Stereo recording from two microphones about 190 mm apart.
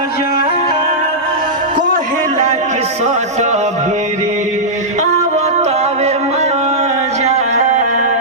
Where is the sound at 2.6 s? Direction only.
35° right (ahead or behind).